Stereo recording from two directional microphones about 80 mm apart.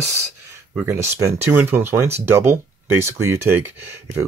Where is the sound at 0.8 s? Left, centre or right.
Right.